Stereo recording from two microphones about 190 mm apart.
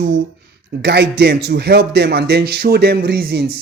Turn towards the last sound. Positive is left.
turn(degrees=-55)  # may be behind; listen again after turning